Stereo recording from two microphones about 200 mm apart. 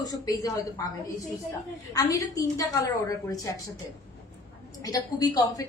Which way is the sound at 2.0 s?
15° left (ahead or behind).